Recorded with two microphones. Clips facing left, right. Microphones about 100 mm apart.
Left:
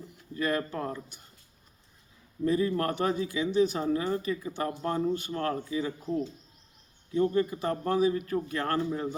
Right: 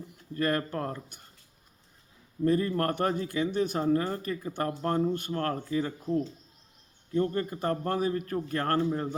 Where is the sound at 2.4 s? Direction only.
50° right (ahead or behind).